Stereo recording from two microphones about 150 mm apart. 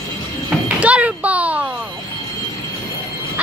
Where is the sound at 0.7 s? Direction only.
10° right (ahead or behind).